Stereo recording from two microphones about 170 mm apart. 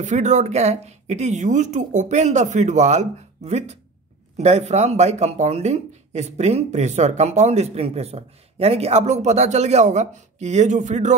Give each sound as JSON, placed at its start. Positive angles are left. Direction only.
{"t": 0.0, "sound": "speech", "side_deg": -45}